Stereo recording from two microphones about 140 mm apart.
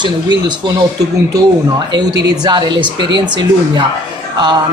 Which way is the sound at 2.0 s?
30° right (ahead or behind).